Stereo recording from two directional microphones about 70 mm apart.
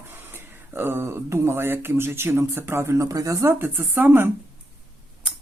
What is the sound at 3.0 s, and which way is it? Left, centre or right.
Speech, right.